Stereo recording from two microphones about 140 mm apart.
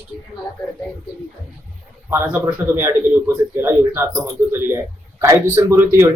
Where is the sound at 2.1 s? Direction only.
15° right (ahead or behind).